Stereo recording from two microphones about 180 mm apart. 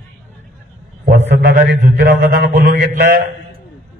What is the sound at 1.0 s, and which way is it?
A man's voice, 60° right (ahead or behind).